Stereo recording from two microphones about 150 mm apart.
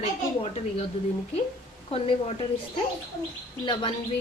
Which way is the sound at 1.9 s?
40° left (ahead or behind).